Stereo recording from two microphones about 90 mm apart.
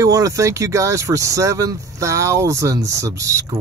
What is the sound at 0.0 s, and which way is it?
Speech, 40° right (ahead or behind).